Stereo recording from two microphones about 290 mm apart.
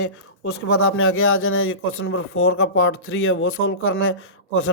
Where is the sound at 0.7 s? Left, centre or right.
Left.